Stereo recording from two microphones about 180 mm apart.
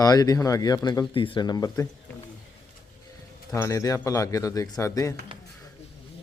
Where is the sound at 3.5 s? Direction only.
15° left (ahead or behind).